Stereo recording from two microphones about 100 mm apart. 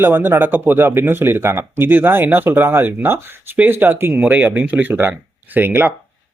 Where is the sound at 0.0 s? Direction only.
20° right (ahead or behind).